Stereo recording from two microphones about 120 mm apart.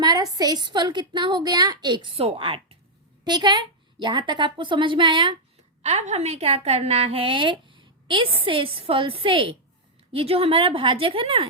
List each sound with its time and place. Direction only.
0.0 s a woman's voice: 35° right (ahead or behind); by 2.7 s 50° right (ahead or behind)
3.2 s a woman's voice: 35° right (ahead or behind)
5.8 s a woman's voice: 70° right (ahead or behind); by 11.4 s 50° right (ahead or behind)